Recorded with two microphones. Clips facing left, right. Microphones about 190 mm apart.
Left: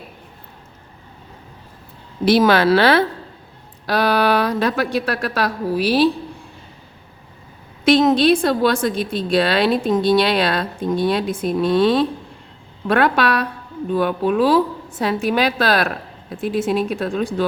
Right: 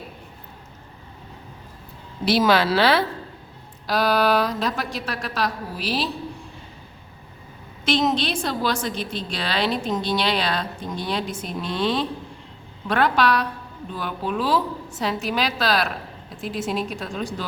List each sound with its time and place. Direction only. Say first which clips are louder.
2.2 s a woman's voice: left 5 dB; 55° left (ahead or behind)
7.9 s a woman's voice: left 8 dB; 55° left (ahead or behind)